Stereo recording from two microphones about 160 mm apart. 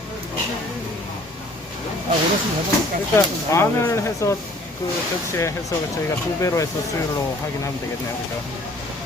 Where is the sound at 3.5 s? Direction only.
20° left (ahead or behind).